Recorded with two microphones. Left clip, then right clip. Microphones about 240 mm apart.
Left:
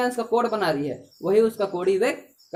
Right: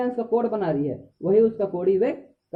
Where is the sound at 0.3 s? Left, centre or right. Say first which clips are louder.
Left 1 dB; centre.